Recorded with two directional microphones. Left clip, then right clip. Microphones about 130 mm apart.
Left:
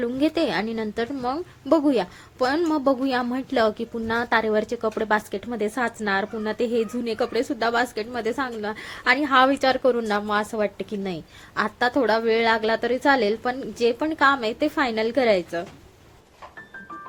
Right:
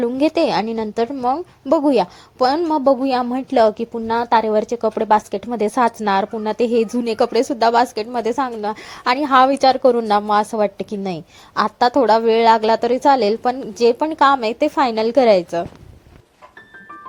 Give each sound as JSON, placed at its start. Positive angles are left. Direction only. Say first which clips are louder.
{"t": 0.0, "sound": "a woman's voice", "louder": "right 6 dB", "side_deg": -30}
{"t": 2.7, "sound": "a woman's voice", "louder": "right 6 dB", "side_deg": -20}